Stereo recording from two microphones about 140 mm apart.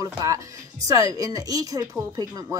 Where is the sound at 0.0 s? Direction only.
25° right (ahead or behind).